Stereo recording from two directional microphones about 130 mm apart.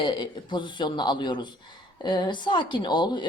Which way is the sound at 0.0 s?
35° left (ahead or behind).